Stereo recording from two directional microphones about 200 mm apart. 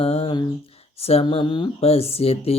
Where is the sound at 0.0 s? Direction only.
30° left (ahead or behind).